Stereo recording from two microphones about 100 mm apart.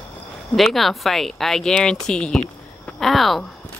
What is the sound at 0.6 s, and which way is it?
Speech, centre (ahead or behind).